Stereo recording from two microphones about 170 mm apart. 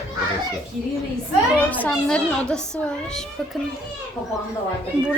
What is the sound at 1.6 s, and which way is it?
Speech, 10° left (ahead or behind).